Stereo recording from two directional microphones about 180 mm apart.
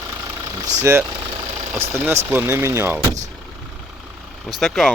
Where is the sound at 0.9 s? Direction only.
15° right (ahead or behind).